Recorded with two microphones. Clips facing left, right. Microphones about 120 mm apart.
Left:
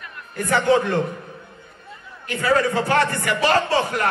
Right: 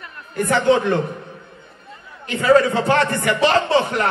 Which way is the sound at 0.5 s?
20° right (ahead or behind).